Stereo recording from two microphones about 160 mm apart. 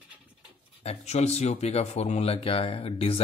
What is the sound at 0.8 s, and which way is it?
Speech, 45° left (ahead or behind).